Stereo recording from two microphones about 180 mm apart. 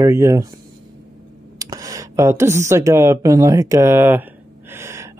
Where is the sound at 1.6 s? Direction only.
20° right (ahead or behind).